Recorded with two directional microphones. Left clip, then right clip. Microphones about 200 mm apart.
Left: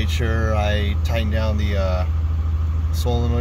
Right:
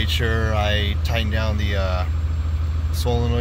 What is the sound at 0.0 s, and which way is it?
Speech, 5° left (ahead or behind).